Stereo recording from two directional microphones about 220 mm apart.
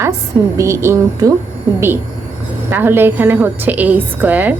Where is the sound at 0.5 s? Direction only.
15° right (ahead or behind).